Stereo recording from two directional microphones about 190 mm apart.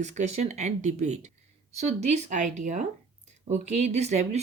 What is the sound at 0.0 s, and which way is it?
Speech, 40° right (ahead or behind).